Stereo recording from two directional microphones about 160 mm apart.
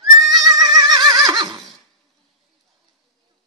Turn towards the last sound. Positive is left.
turn(degrees=-25)  # may be behind; listen again after turning